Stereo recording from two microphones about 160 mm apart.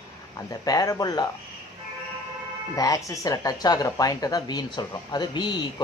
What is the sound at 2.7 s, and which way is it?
Speech, 20° left (ahead or behind).